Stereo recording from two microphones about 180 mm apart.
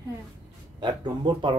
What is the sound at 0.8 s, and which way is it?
Speech, 25° right (ahead or behind).